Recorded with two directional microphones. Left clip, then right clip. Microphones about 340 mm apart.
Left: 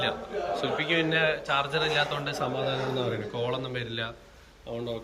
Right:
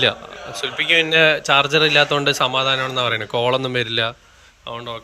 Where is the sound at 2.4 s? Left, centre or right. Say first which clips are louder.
Right 11 dB; centre.